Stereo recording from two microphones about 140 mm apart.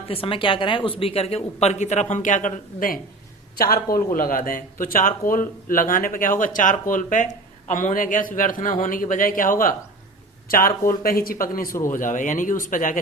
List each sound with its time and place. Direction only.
0.1 s a woman's voice: 40° left (ahead or behind); by 3.0 s 75° left (ahead or behind)
3.6 s a man's voice: 90° left
10.5 s speech: 90° left
11.9 s a man's voice: 65° left (ahead or behind)